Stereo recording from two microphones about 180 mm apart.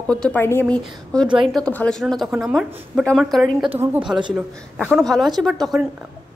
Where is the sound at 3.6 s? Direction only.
30° right (ahead or behind).